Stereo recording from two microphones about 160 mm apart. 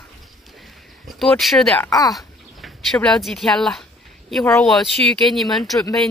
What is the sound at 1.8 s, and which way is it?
Speech, 20° left (ahead or behind).